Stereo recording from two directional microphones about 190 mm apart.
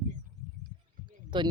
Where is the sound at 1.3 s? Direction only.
25° right (ahead or behind).